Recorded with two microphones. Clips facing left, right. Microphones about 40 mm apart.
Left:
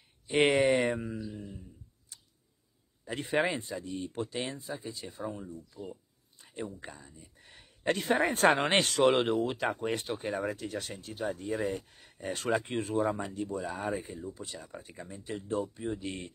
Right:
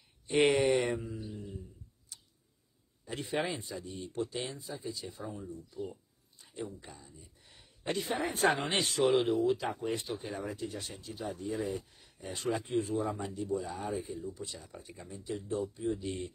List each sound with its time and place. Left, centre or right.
0.3 s speech: left
0.7 s mantra: left
1.1 s mantra: left
3.1 s speech: left